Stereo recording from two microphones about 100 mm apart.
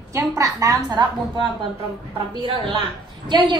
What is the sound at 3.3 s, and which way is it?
Speech, 45° right (ahead or behind).